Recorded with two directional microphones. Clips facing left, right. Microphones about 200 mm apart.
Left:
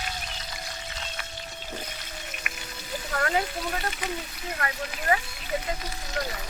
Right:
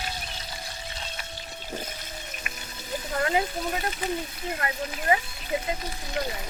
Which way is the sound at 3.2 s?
20° right (ahead or behind).